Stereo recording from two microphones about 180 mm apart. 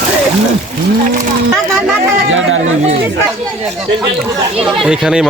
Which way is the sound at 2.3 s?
90° right.